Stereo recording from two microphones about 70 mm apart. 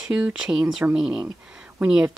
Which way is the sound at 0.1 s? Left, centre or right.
Centre.